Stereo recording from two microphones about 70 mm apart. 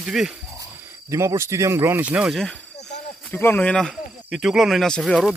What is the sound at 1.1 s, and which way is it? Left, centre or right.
Speech, right.